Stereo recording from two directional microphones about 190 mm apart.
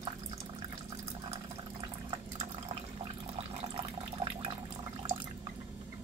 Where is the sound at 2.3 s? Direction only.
30° right (ahead or behind).